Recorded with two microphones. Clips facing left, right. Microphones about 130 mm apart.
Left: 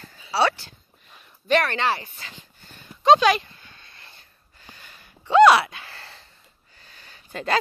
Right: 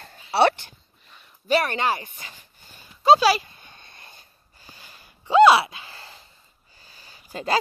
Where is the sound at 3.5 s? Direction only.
20° right (ahead or behind).